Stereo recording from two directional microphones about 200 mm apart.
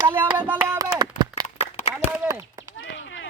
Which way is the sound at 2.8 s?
65° left (ahead or behind).